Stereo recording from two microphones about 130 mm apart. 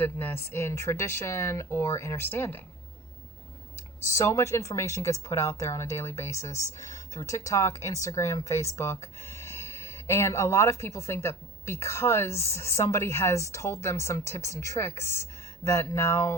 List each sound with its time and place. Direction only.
0.0 s speech: 15° left (ahead or behind)
4.0 s speech: 20° left (ahead or behind)